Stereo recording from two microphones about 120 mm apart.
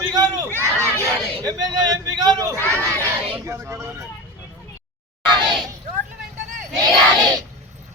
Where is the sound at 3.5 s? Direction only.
20° right (ahead or behind).